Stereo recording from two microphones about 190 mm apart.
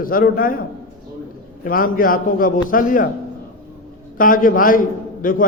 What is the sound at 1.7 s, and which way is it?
A man's voice, 50° left (ahead or behind).